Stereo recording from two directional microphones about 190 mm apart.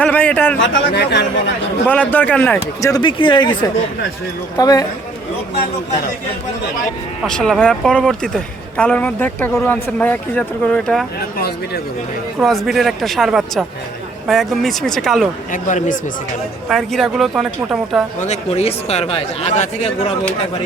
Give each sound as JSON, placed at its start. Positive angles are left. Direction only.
{"t": 0.0, "sound": "speech", "side_deg": 5}
{"t": 0.6, "sound": "speech", "side_deg": 65}
{"t": 1.9, "sound": "speech", "side_deg": 10}
{"t": 7.3, "sound": "a woman's voice", "side_deg": 5}
{"t": 11.3, "sound": "speech", "side_deg": 60}
{"t": 12.4, "sound": "a woman's voice", "side_deg": 0}
{"t": 15.5, "sound": "speech", "side_deg": 45}
{"t": 16.6, "sound": "a woman's voice", "side_deg": 0}
{"t": 18.2, "sound": "speech", "side_deg": 35}